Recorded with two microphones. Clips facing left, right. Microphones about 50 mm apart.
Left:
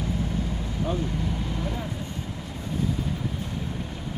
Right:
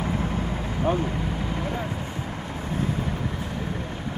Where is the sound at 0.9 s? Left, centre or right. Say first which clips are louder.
Right 6 dB; right.